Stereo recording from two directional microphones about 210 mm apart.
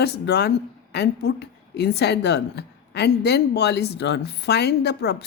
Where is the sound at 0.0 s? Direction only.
50° left (ahead or behind).